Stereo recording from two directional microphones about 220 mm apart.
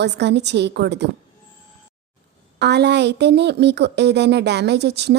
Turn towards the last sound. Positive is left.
turn(degrees=-50)  # may be behind; listen again after turning